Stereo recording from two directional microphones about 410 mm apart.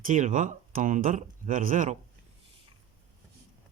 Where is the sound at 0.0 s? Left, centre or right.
Centre.